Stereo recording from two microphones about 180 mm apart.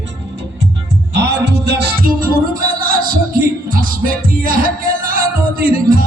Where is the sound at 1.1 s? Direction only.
70° right (ahead or behind); by 2.4 s 50° right (ahead or behind).